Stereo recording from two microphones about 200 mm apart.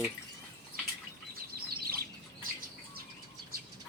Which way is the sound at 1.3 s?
50° right (ahead or behind).